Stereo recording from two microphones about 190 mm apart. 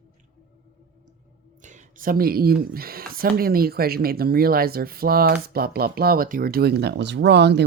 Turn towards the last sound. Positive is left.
turn(degrees=-65)  # may be behind; listen again after turning